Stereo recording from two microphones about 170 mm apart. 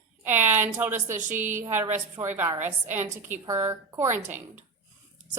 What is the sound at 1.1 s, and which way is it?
Speech, 50° right (ahead or behind).